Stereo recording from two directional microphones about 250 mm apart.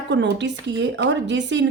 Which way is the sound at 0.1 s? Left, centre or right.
Right.